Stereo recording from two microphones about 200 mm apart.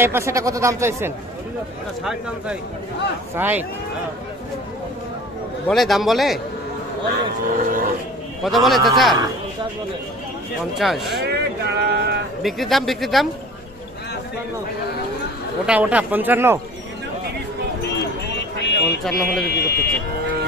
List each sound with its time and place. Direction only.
0.0 s speech: 15° right (ahead or behind)
5.7 s speech: centre (ahead or behind)
7.4 s speech: 45° right (ahead or behind)
8.5 s speech: centre (ahead or behind)
10.8 s speech: centre (ahead or behind)
11.1 s speech: 55° right (ahead or behind)
12.4 s speech: centre (ahead or behind)
15.6 s speech: 5° right (ahead or behind)
18.6 s a sound: 55° left (ahead or behind)
19.0 s speech: centre (ahead or behind)
19.4 s speech: 55° left (ahead or behind)